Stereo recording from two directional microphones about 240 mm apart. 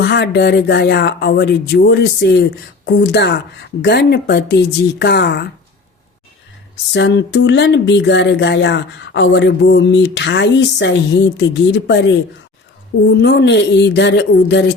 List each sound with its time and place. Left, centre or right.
0.0 s speech: left
6.9 s speech: left